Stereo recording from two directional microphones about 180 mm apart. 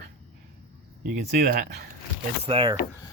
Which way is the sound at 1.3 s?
60° right (ahead or behind).